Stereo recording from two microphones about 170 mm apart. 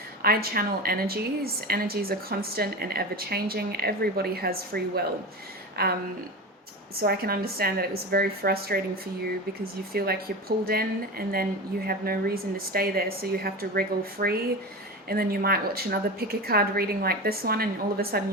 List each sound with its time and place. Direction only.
0.2 s a woman's voice: 60° right (ahead or behind)
7.0 s a woman's voice: 65° right (ahead or behind)
9.9 s a woman's voice: 65° right (ahead or behind)